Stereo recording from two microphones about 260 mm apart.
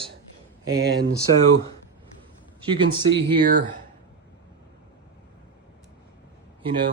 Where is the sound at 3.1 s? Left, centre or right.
Right.